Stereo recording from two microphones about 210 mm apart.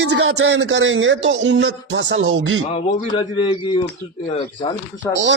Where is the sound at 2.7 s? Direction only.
25° left (ahead or behind).